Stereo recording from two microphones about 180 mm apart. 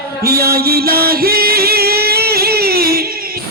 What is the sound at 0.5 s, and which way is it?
Music, 60° right (ahead or behind).